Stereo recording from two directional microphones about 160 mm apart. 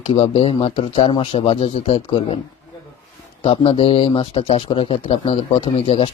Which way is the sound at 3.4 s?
35° left (ahead or behind).